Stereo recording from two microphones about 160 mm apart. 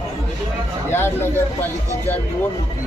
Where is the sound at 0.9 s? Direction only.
15° left (ahead or behind).